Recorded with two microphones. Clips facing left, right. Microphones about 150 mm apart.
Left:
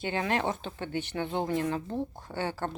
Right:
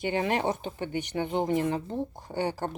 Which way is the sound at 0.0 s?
15° right (ahead or behind).